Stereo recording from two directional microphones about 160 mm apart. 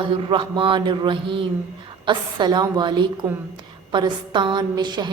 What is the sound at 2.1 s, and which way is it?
A woman's voice, 30° right (ahead or behind).